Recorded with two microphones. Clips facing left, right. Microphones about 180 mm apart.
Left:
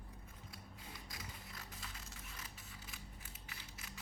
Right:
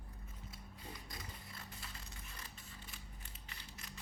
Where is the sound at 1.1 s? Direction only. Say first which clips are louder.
Right 1 dB; centre (ahead or behind).